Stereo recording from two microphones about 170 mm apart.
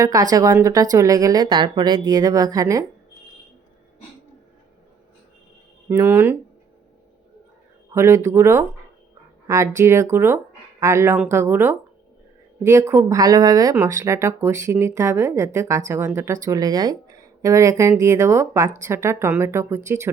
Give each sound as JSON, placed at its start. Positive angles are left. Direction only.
{"t": 0.0, "sound": "a woman's voice", "side_deg": -20}
{"t": 5.9, "sound": "speech", "side_deg": -15}
{"t": 7.9, "sound": "speech", "side_deg": -15}